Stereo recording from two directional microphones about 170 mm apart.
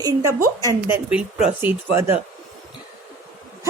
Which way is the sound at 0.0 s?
20° right (ahead or behind).